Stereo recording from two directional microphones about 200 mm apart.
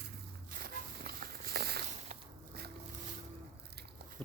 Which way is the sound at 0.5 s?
45° right (ahead or behind).